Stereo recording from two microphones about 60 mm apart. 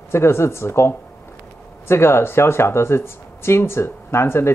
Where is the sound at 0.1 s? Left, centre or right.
Left.